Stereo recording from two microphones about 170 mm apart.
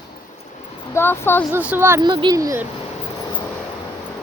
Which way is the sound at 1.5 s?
10° right (ahead or behind).